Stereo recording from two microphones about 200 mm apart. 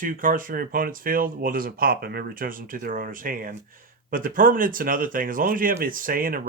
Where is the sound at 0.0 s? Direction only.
45° right (ahead or behind).